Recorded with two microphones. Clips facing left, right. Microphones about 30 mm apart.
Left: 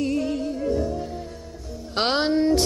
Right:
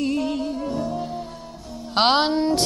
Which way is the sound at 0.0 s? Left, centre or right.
Right.